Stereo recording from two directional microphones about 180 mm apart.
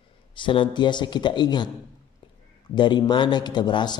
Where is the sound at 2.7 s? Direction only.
25° left (ahead or behind).